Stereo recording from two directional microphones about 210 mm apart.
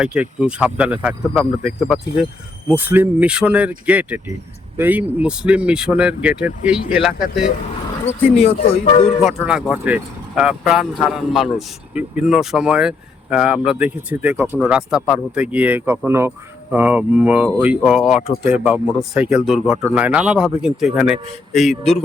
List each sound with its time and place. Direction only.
0.0 s speech: 5° right (ahead or behind)
8.0 s speech: 35° left (ahead or behind)
9.2 s speech: centre (ahead or behind)